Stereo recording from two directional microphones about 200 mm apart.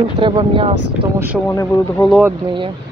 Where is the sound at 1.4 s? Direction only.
15° left (ahead or behind).